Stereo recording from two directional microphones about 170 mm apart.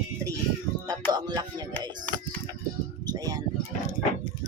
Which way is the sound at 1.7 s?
10° left (ahead or behind).